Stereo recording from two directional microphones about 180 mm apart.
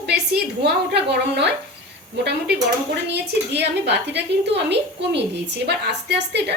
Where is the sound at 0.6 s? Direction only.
70° right (ahead or behind).